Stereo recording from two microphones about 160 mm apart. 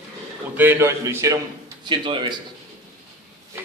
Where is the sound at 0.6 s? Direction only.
15° right (ahead or behind).